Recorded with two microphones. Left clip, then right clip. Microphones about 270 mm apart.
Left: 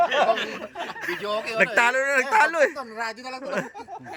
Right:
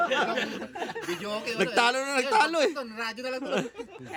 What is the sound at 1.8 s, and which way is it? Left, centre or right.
Speech, centre.